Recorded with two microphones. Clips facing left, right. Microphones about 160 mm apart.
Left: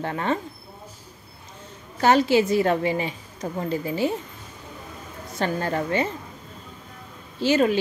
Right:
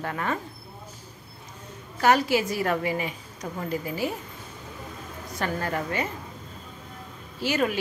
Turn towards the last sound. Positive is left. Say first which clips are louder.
# left 6 dB
turn(degrees=25)  # may be behind; listen again after turning